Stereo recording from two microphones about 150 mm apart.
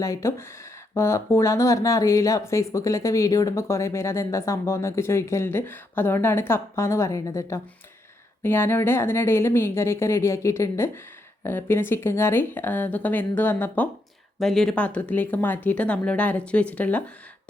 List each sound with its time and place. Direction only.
0.0 s speech: 20° left (ahead or behind)
14.3 s speech: centre (ahead or behind)